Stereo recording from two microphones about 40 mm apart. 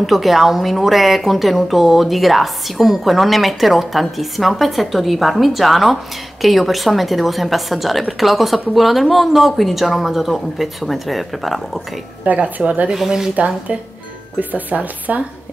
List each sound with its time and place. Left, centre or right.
0.0 s a woman's voice: centre
12.3 s speech: right
12.9 s speech: centre
14.5 s speech: right